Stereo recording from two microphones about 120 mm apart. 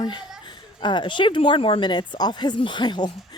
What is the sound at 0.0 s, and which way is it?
A child's voice, 40° left (ahead or behind).